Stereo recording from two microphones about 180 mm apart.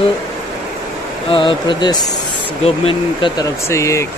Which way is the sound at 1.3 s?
30° left (ahead or behind).